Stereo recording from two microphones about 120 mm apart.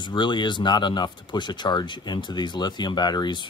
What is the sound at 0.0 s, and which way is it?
Speech, 40° left (ahead or behind).